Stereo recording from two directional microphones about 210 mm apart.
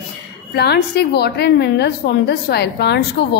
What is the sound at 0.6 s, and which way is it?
A woman's voice, 50° left (ahead or behind).